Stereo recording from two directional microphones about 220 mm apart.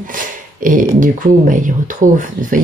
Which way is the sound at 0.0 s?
40° right (ahead or behind).